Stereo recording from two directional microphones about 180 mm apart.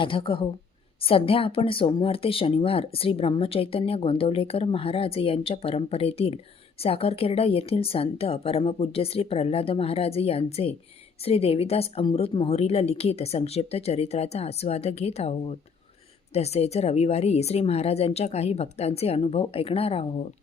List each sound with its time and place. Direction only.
0.0 s speech: 25° left (ahead or behind)